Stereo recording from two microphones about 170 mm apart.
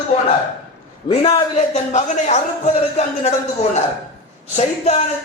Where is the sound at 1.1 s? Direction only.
40° left (ahead or behind).